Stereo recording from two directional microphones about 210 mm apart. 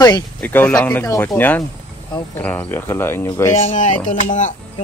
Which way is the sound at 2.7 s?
10° left (ahead or behind).